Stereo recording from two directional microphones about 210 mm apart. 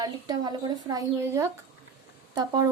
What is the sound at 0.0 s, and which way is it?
A woman's voice, 20° right (ahead or behind).